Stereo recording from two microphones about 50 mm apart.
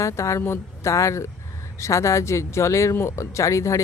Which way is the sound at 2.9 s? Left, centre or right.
Left.